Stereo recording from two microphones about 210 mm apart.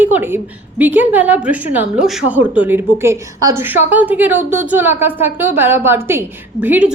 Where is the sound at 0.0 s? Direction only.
10° right (ahead or behind).